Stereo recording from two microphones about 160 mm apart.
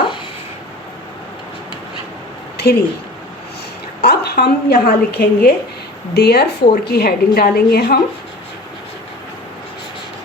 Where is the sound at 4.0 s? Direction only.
75° left (ahead or behind).